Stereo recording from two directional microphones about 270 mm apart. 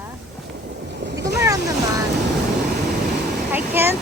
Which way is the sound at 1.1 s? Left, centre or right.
Right.